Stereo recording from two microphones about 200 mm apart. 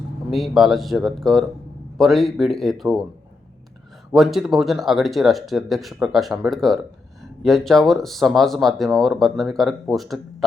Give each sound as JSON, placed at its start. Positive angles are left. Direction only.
{"t": 0.3, "sound": "speech", "side_deg": 0}
{"t": 4.1, "sound": "speech", "side_deg": 0}